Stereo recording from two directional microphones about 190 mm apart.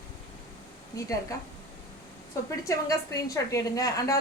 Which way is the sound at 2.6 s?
15° left (ahead or behind).